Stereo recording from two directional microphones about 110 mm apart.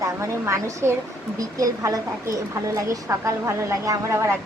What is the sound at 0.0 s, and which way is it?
A woman's voice, 30° right (ahead or behind).